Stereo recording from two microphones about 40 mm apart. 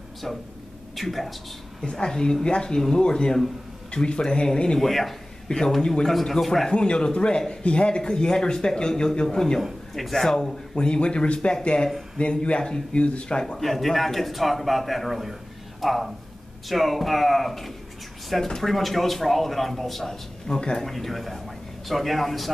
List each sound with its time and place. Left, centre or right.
0.9 s speech: centre
1.8 s speech: centre
4.7 s speech: centre
5.8 s speech: centre
6.7 s speech: left
9.9 s speech: centre; by 13.4 s left
13.6 s speech: centre
20.4 s speech: centre